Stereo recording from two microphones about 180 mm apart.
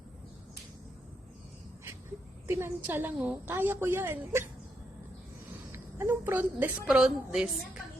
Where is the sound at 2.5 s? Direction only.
15° right (ahead or behind).